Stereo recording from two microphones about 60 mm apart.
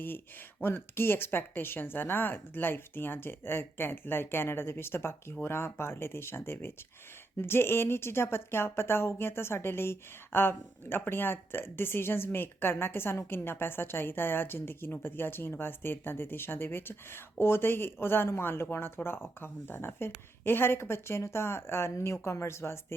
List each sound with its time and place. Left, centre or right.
0.6 s speech: left